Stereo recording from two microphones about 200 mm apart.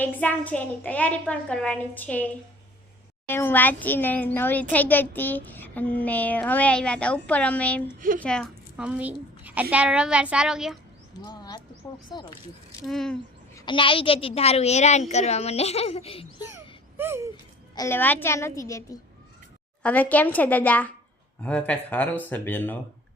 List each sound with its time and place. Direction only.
0.0 s speech: 10° left (ahead or behind)
7.9 s a child's voice: 45° right (ahead or behind)
8.2 s a child's voice: 5° left (ahead or behind)
11.3 s a sound: 20° left (ahead or behind)
12.1 s speech: 20° left (ahead or behind)
12.8 s a child's voice: centre (ahead or behind)
13.7 s a woman's voice: 25° left (ahead or behind)
17.0 s a sound: 10° right (ahead or behind)
17.3 s a woman's voice: 15° left (ahead or behind)